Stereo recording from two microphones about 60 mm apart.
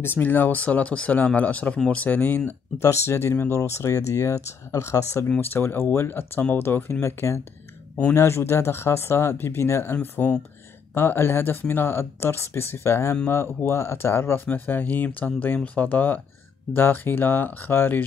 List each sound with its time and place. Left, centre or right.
0.0 s speech: left
2.8 s speech: left
5.4 s speech: left
11.0 s speech: left
14.4 s speech: left